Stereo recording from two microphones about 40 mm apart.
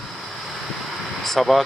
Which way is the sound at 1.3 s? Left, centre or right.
Centre.